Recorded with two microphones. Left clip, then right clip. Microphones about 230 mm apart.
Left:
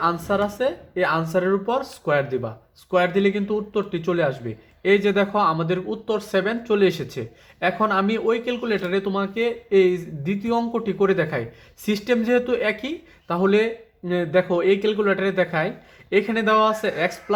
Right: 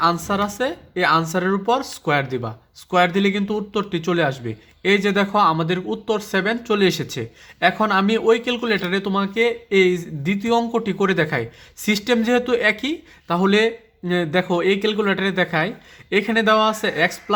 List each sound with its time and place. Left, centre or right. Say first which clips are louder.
0.0 s speech: right 2 dB; right